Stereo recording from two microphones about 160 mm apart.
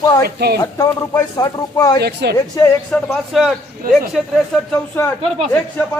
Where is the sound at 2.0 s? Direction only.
90° right.